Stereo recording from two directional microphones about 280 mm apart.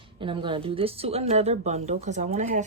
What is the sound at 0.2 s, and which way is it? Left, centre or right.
Speech, centre.